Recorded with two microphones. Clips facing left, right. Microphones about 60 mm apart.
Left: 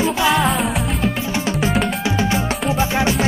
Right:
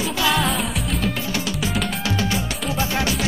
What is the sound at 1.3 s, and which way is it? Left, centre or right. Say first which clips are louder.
Music: left 5 dB; left.